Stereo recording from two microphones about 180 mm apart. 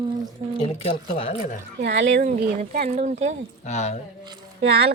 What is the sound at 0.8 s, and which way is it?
Speech, 35° left (ahead or behind).